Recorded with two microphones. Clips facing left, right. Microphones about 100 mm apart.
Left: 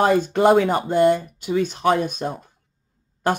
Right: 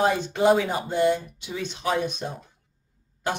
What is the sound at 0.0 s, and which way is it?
Speech, 50° left (ahead or behind).